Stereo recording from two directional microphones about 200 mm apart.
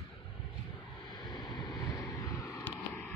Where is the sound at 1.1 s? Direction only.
20° left (ahead or behind).